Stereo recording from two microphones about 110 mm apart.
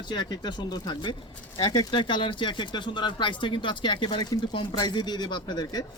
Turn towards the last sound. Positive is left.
turn(degrees=40)  # may be behind; listen again after turning